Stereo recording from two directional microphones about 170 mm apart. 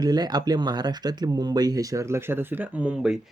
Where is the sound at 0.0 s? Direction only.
25° right (ahead or behind).